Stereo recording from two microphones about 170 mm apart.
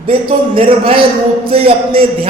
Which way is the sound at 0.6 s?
30° right (ahead or behind).